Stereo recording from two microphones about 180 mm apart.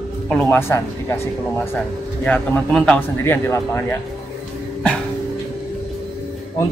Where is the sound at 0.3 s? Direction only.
5° left (ahead or behind).